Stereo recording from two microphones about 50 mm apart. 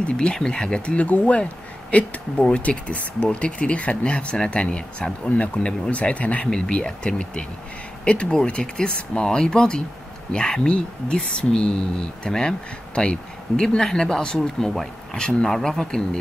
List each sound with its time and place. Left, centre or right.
0.0 s speech: centre